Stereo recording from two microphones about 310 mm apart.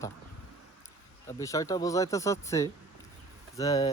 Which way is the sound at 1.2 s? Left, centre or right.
Centre.